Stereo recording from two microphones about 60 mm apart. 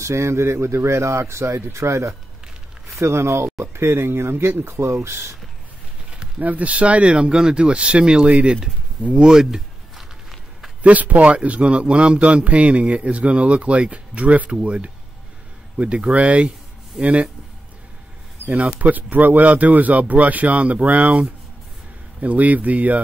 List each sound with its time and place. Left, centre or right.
0.0 s speech: right
6.4 s speech: right; by 10.0 s centre
10.8 s a man's voice: right
18.5 s a man's voice: right